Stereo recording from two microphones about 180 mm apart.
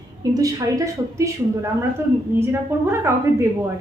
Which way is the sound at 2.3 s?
10° right (ahead or behind).